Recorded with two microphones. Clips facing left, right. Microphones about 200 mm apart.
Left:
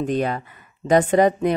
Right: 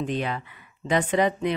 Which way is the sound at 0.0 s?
45° left (ahead or behind).